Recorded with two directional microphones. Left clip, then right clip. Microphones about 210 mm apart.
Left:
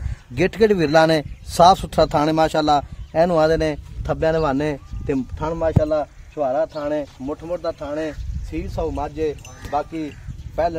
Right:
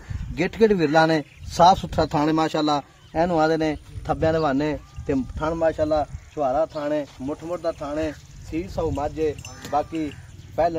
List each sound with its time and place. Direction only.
0.3 s a man's voice: 45° left (ahead or behind)